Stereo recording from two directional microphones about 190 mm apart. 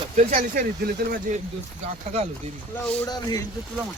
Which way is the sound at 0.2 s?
45° right (ahead or behind).